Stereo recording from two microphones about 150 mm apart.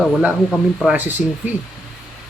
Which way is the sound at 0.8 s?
10° right (ahead or behind).